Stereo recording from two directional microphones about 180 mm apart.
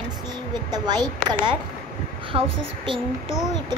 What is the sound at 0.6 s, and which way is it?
Speech, 20° right (ahead or behind).